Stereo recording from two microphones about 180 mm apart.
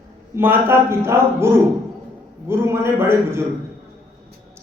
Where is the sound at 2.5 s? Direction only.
15° right (ahead or behind).